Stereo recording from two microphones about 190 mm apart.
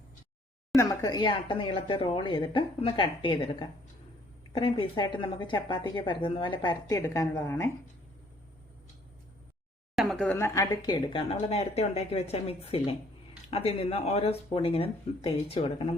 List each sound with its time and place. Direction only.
0.8 s a woman's voice: 20° left (ahead or behind)
9.9 s a woman's voice: centre (ahead or behind); by 15.7 s 30° left (ahead or behind)